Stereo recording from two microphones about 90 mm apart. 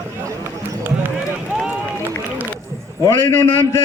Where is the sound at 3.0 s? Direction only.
30° left (ahead or behind).